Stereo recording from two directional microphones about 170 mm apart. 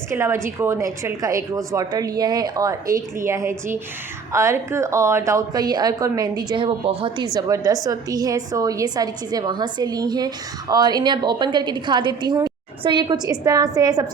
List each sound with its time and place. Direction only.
0.1 s a woman's voice: 15° right (ahead or behind)